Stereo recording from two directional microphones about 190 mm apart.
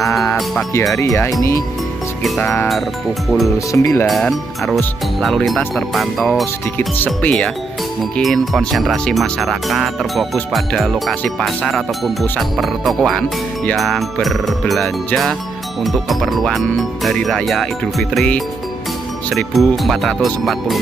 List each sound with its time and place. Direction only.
0.9 s speech: 15° left (ahead or behind)
2.2 s speech: centre (ahead or behind)
3.5 s speech: 15° left (ahead or behind)
4.1 s speech: centre (ahead or behind)